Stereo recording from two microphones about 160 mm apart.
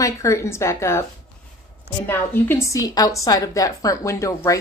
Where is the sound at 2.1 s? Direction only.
15° left (ahead or behind).